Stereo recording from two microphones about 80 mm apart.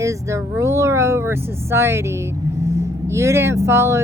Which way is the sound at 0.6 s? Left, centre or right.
Right.